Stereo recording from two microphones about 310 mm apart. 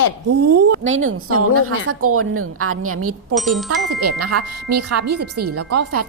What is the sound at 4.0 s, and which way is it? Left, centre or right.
Speech, right.